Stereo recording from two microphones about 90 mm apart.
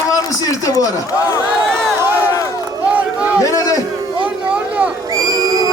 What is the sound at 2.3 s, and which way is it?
Run, 40° left (ahead or behind).